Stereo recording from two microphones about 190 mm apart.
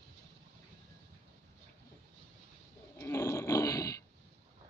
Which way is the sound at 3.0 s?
15° left (ahead or behind).